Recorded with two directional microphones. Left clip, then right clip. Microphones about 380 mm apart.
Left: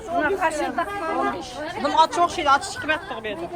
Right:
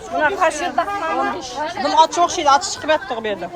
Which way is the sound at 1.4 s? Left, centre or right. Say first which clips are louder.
Right 5 dB; centre.